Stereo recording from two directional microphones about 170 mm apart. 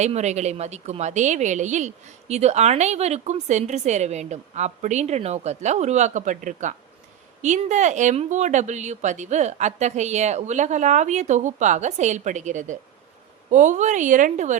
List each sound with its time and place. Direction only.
0.0 s a woman's voice: 40° right (ahead or behind)